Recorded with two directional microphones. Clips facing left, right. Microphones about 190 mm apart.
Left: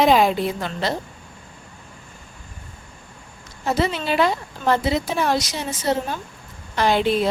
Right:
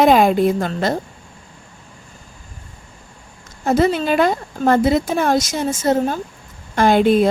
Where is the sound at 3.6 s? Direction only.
45° right (ahead or behind).